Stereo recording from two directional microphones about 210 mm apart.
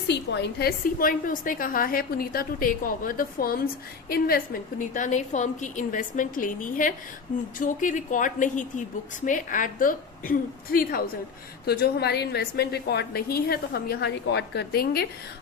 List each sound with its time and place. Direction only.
0.1 s a woman's voice: 55° left (ahead or behind)